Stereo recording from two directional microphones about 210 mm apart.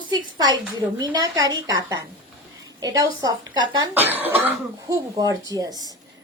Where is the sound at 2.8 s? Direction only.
15° right (ahead or behind).